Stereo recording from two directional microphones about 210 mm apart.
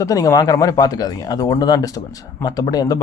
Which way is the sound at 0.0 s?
15° left (ahead or behind).